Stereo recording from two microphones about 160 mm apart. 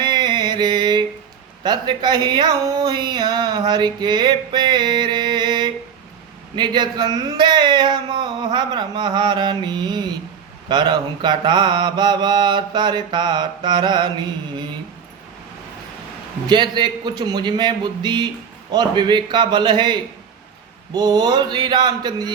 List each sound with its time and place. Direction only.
0.0 s mantra: 25° right (ahead or behind)
1.6 s speech: 30° right (ahead or behind)
16.5 s speech: 30° right (ahead or behind)